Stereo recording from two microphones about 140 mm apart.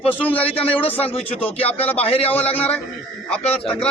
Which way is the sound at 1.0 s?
45° left (ahead or behind).